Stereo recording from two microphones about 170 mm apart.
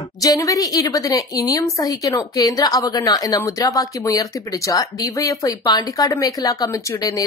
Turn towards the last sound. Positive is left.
turn(degrees=20)  # may be behind; listen again after turning